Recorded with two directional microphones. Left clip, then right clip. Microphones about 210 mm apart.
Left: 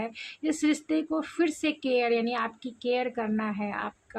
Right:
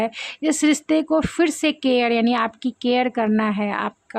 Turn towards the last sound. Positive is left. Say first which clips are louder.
# right 9 dB
turn(degrees=-45)  # may be behind; listen again after turning